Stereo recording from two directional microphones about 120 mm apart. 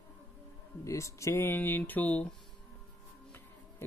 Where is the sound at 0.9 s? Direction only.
25° left (ahead or behind).